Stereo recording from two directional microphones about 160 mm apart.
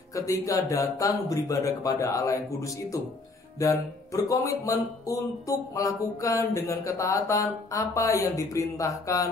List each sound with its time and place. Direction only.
0.1 s speech: 20° left (ahead or behind)
3.5 s speech: 20° left (ahead or behind)